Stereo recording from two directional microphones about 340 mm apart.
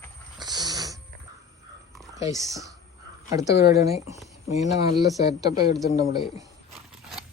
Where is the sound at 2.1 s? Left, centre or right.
Centre.